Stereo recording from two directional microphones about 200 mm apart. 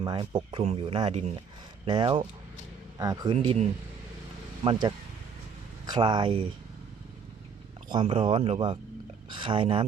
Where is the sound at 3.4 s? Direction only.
35° right (ahead or behind).